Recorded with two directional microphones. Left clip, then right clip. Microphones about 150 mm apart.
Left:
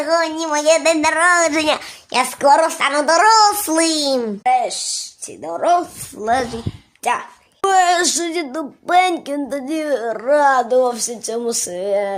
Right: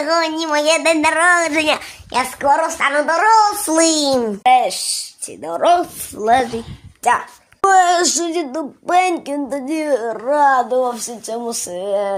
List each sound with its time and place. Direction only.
0.0 s speech: 35° right (ahead or behind)
0.6 s speech: 5° right (ahead or behind)
2.4 s a woman's voice: 45° left (ahead or behind)
2.6 s a child's voice: 25° left (ahead or behind)
3.7 s speech: centre (ahead or behind)
4.4 s speech: 35° right (ahead or behind)
6.2 s speech: 10° right (ahead or behind)
7.6 s speech: 5° left (ahead or behind)
10.2 s speech: 15° left (ahead or behind)